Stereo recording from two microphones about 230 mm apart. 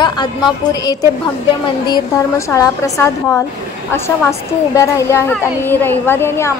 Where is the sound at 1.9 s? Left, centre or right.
Centre.